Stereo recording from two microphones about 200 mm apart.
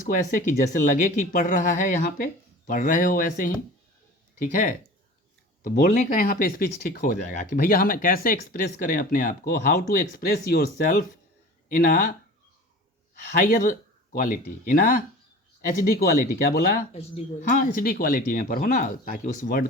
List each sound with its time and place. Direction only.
0.0 s speech: 40° left (ahead or behind)
13.1 s speech: 40° left (ahead or behind)
16.9 s speech: 30° left (ahead or behind)